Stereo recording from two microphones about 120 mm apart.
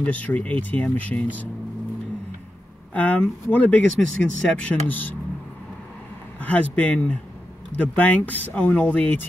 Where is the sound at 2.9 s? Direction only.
10° left (ahead or behind).